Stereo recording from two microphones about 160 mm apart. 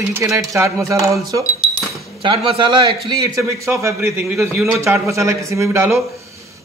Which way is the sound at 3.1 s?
20° right (ahead or behind).